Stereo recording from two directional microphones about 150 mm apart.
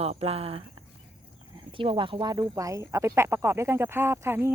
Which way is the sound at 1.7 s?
35° right (ahead or behind).